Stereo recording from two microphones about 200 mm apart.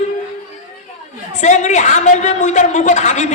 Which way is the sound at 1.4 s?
35° left (ahead or behind).